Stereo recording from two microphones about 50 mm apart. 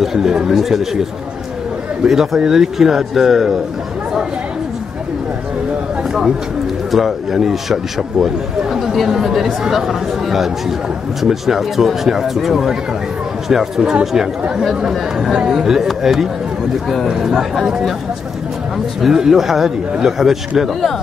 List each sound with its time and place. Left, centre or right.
0.0 s a man's voice: centre
2.0 s speech: centre
6.9 s a man's voice: centre
18.9 s a man's voice: centre